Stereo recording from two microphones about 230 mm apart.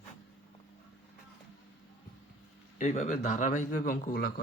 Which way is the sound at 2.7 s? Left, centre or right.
Left.